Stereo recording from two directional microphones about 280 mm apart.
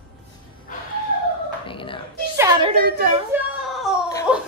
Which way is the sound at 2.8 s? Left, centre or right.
Right.